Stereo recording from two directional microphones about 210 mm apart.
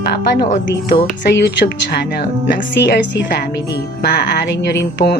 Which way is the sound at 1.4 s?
55° left (ahead or behind).